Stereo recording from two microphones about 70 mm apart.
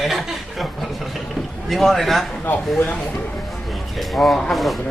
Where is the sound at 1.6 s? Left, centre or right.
Centre.